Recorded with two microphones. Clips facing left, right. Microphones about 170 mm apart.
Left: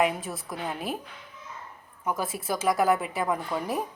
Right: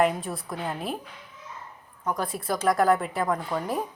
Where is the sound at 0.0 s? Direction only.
Centre (ahead or behind).